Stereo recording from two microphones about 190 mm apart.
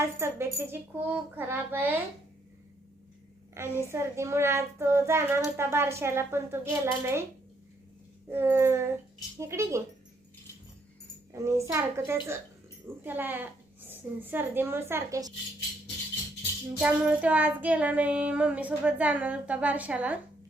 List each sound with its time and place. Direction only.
0.0 s child singing: 15° right (ahead or behind)
3.6 s child singing: 15° right (ahead or behind)
8.3 s child singing: 10° right (ahead or behind)
11.3 s a child's voice: 15° right (ahead or behind)
11.7 s child singing: 15° right (ahead or behind)
16.8 s child singing: 5° right (ahead or behind)